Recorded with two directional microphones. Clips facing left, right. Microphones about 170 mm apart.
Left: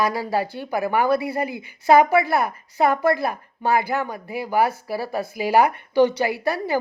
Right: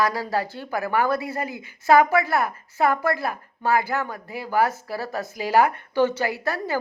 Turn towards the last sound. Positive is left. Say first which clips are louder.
# left 3 dB
turn(degrees=15)  # may be behind; listen again after turning